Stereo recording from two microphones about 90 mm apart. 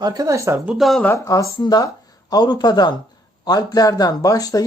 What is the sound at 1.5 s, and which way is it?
A man's voice, 50° left (ahead or behind).